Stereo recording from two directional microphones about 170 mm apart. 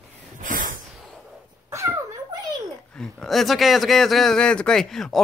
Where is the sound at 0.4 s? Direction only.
50° right (ahead or behind).